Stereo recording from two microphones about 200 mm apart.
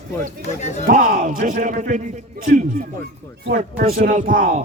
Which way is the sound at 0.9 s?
40° right (ahead or behind).